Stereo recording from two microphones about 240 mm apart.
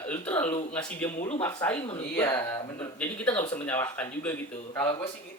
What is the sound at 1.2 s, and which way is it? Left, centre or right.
Speech, left.